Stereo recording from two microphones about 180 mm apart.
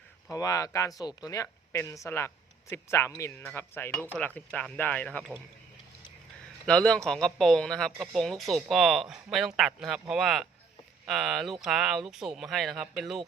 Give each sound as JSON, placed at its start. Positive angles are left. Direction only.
{"t": 0.3, "sound": "speech", "side_deg": 20}
{"t": 6.7, "sound": "speech", "side_deg": 5}